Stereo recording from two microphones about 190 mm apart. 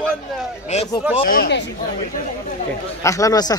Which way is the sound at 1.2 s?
55° left (ahead or behind).